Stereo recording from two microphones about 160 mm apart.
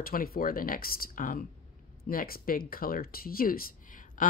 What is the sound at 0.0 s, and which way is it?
Speech, 65° left (ahead or behind).